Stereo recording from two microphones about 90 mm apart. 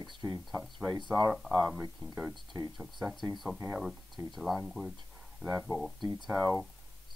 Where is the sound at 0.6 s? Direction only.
Centre (ahead or behind).